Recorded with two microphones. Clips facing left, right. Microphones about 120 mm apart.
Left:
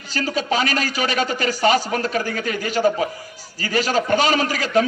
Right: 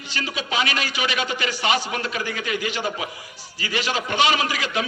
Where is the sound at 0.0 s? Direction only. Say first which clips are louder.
Left 6 dB; 40° left (ahead or behind).